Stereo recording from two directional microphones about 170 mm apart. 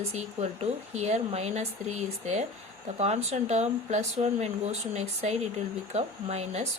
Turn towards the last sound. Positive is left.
turn(degrees=-40)  # may be behind; listen again after turning